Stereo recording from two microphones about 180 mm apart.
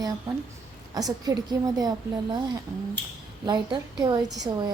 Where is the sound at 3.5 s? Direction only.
25° right (ahead or behind).